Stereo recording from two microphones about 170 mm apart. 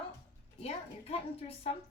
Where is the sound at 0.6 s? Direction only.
35° left (ahead or behind).